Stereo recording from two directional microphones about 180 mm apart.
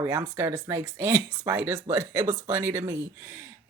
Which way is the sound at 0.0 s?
15° right (ahead or behind).